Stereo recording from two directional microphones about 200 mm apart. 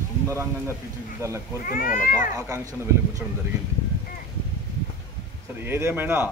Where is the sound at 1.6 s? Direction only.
45° left (ahead or behind).